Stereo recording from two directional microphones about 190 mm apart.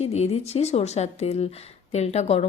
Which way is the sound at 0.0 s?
35° left (ahead or behind).